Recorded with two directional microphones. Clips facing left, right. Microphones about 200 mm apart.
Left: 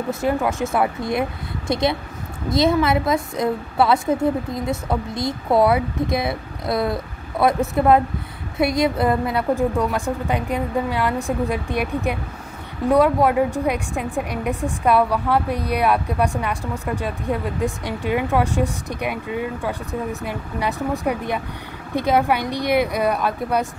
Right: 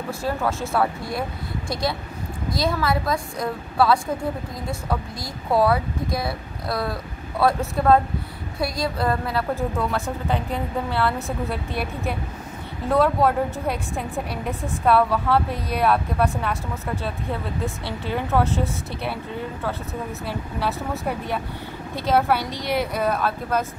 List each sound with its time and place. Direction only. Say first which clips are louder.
0.1 s a woman's voice: left 4 dB; 15° left (ahead or behind)